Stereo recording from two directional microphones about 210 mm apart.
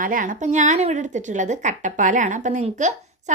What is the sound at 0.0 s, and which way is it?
A woman's voice, 40° right (ahead or behind).